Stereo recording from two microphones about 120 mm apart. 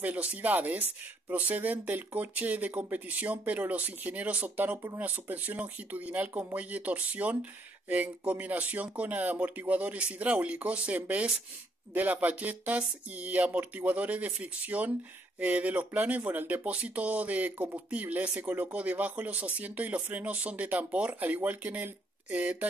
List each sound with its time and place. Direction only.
0.0 s speech: 10° right (ahead or behind)